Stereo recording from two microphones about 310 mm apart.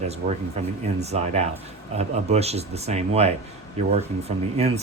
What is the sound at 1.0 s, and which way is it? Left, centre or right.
Speech, right.